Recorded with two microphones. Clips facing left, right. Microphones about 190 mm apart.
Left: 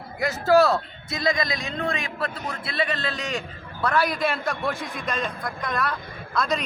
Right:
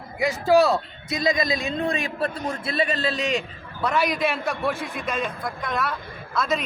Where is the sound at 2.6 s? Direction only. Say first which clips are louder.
Right 3 dB; 35° right (ahead or behind).